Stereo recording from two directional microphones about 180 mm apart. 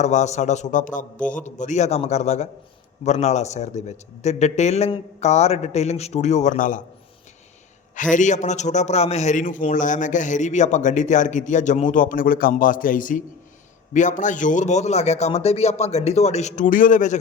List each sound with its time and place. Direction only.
0.0 s a man's voice: 40° left (ahead or behind)
8.1 s a man's voice: 40° left (ahead or behind)